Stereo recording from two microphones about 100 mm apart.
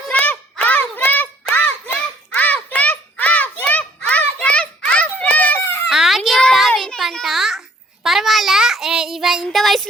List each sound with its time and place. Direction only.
0.1 s hands: 15° left (ahead or behind)
5.9 s a sound: 5° right (ahead or behind)
8.0 s child singing: centre (ahead or behind)